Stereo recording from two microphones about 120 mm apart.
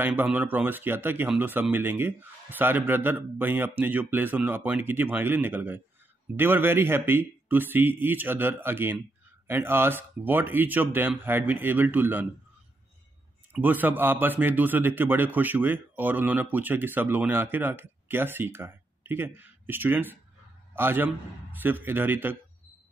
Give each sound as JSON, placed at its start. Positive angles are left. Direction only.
{"t": 0.0, "sound": "a man's voice", "side_deg": -15}
{"t": 13.5, "sound": "a man's voice", "side_deg": -15}